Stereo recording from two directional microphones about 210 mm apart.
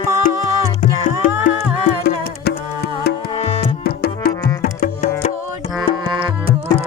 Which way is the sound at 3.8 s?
45° left (ahead or behind).